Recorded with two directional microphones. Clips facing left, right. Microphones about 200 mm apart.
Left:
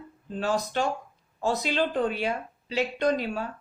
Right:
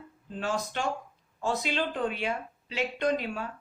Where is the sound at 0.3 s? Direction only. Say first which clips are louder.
Left 5 dB; 35° left (ahead or behind).